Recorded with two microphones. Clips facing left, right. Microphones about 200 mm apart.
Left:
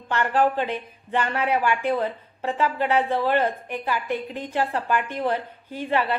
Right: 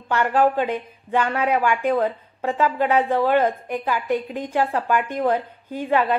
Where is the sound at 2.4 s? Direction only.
10° right (ahead or behind).